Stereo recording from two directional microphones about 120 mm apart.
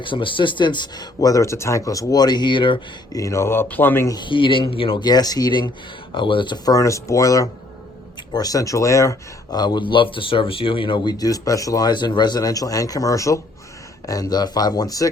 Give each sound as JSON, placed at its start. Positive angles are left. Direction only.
{"t": 0.0, "sound": "speech", "side_deg": 45}
{"t": 3.2, "sound": "speech", "side_deg": 25}
{"t": 4.1, "sound": "speech", "side_deg": 40}
{"t": 5.0, "sound": "speech", "side_deg": 35}